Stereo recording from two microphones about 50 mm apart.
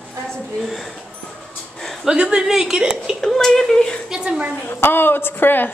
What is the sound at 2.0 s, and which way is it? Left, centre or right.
A woman's voice, centre.